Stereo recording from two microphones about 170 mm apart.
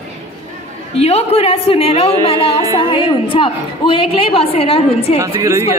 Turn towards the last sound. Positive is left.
turn(degrees=-20)  # may be behind; listen again after turning